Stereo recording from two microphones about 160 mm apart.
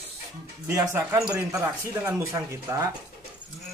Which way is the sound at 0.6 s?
15° right (ahead or behind).